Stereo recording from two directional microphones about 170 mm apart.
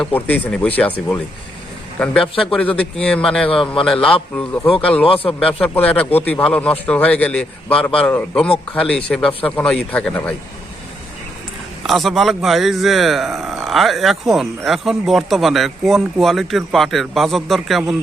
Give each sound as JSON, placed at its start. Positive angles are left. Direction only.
{"t": 0.0, "sound": "a man's voice", "side_deg": 10}
{"t": 5.0, "sound": "speech", "side_deg": 35}
{"t": 5.4, "sound": "a man's voice", "side_deg": 5}
{"t": 11.9, "sound": "speech", "side_deg": 0}